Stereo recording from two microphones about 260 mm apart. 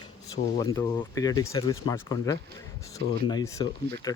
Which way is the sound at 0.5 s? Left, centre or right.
Centre.